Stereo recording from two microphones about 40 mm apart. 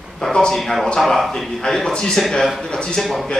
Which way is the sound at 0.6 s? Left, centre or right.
Centre.